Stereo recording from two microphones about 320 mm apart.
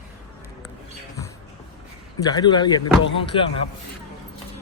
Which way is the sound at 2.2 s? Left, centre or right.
Centre.